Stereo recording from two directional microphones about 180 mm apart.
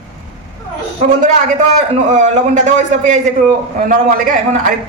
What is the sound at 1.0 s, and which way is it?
A man's voice, 40° right (ahead or behind).